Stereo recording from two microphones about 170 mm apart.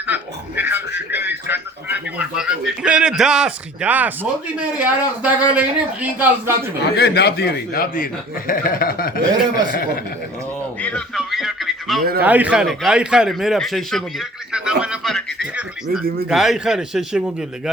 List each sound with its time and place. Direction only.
0.1 s a sound: 10° right (ahead or behind)
4.8 s speech: 10° right (ahead or behind)
6.9 s speech: 70° left (ahead or behind)
10.8 s a man's voice: 5° left (ahead or behind)